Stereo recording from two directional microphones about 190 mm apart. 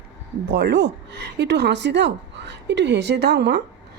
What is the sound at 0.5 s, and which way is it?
Speech, 65° right (ahead or behind).